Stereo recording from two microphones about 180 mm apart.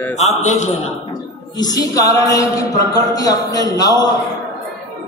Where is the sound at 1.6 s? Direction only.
20° left (ahead or behind).